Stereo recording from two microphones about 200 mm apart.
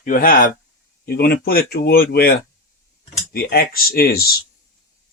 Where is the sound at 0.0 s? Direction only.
45° left (ahead or behind).